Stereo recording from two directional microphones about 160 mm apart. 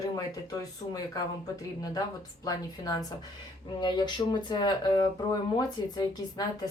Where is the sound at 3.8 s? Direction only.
25° left (ahead or behind).